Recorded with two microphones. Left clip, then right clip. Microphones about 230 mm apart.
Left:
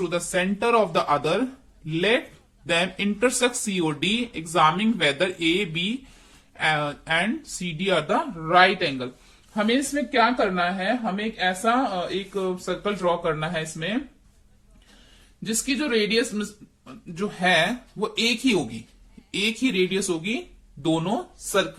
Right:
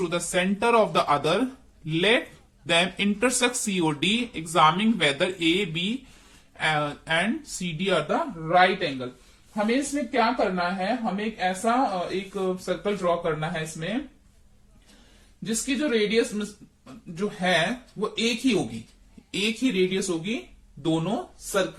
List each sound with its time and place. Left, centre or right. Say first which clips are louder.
0.0 s a woman's voice: left 1 dB; centre; by 13.9 s left
15.4 s a woman's voice: left 1 dB; left